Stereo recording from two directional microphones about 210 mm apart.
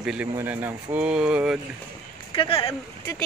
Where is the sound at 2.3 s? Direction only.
25° left (ahead or behind).